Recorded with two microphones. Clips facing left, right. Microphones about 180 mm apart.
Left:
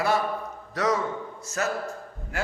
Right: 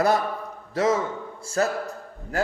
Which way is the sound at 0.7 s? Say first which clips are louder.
Right 3 dB; 25° right (ahead or behind).